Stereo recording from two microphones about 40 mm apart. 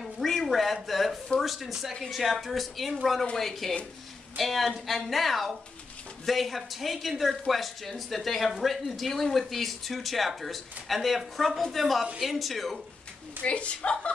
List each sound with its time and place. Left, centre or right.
0.0 s a sound: centre
1.4 s speech: centre
13.4 s a woman's voice: left